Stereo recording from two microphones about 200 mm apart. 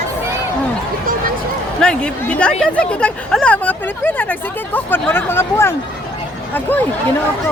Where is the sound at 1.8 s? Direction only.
5° left (ahead or behind).